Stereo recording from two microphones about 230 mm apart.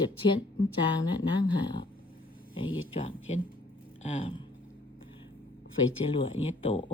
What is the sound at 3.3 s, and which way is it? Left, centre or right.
Mantra, left.